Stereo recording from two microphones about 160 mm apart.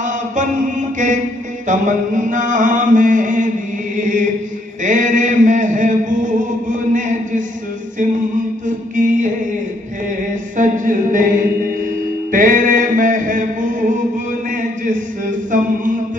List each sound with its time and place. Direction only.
0.0 s mantra: 50° right (ahead or behind)
3.9 s chant: 55° right (ahead or behind)
4.8 s a sound: 50° right (ahead or behind)
8.6 s chant: 55° right (ahead or behind)
10.0 s mantra: 55° right (ahead or behind)